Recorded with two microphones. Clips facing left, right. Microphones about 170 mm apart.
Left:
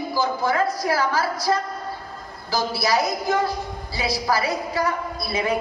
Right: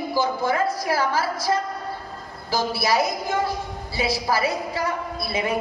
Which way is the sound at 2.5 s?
25° right (ahead or behind).